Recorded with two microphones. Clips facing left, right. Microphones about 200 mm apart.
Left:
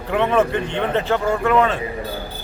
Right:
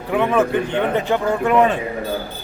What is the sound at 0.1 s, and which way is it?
Speech, 10° right (ahead or behind).